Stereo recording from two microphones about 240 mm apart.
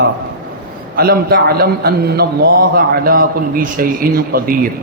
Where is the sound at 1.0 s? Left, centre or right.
Right.